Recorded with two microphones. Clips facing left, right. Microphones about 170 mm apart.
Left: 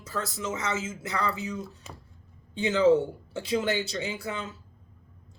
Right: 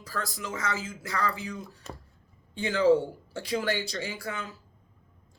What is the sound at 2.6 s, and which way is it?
Speech, 25° left (ahead or behind).